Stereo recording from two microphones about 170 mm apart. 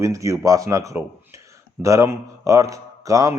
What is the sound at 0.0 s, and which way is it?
A man's voice, 20° right (ahead or behind).